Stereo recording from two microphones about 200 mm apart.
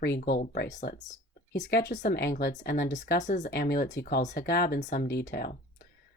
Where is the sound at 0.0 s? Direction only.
55° left (ahead or behind).